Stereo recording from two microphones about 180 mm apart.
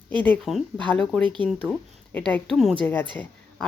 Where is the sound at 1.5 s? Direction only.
Centre (ahead or behind).